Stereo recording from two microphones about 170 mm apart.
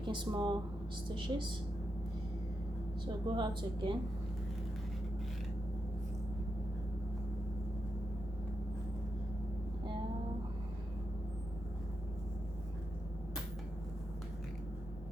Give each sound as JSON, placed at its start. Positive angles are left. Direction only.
{"t": 0.0, "sound": "a woman's voice", "side_deg": -25}
{"t": 3.1, "sound": "a woman's voice", "side_deg": -25}